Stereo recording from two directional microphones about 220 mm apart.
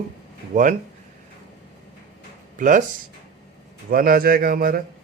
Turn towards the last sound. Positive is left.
turn(degrees=-40)  # may be behind; listen again after turning